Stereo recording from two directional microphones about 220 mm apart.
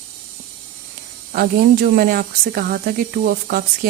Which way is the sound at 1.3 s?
45° right (ahead or behind).